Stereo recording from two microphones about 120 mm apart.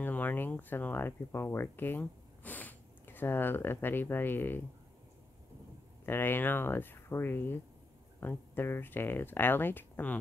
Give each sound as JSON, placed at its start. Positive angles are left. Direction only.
{"t": 0.0, "sound": "speech", "side_deg": 15}
{"t": 6.0, "sound": "speech", "side_deg": 20}